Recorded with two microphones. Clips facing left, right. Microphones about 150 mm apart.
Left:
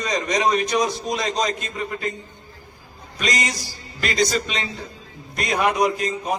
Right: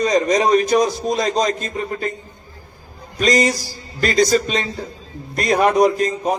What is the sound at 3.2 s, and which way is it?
A man's voice, 30° right (ahead or behind).